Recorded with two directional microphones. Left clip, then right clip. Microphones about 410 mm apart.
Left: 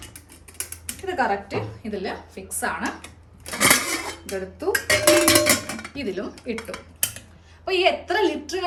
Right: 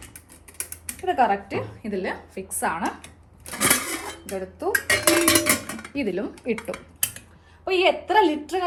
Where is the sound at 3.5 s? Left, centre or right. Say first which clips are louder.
Left 4 dB; centre.